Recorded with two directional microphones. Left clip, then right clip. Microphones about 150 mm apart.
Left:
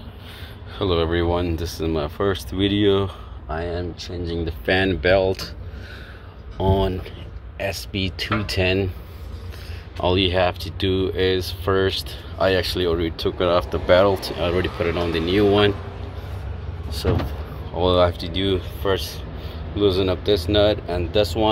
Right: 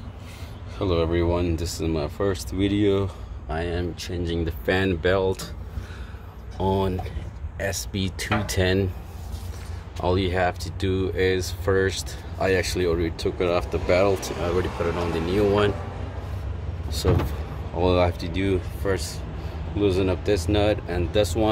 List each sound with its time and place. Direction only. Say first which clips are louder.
0.7 s speech: left 2 dB; centre (ahead or behind)
3.4 s speech: left 1 dB; 20° right (ahead or behind)
4.6 s speech: left 4 dB; centre (ahead or behind)
6.6 s speech: left 3 dB; centre (ahead or behind)
9.9 s speech: left 4 dB; centre (ahead or behind)
17.7 s speech: left 4 dB; 15° right (ahead or behind)
18.8 s speech: left 4 dB; 5° right (ahead or behind)